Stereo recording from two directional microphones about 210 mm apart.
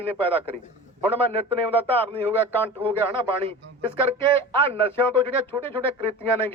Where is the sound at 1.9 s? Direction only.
10° left (ahead or behind).